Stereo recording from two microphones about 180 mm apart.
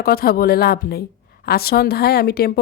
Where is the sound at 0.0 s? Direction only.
55° left (ahead or behind).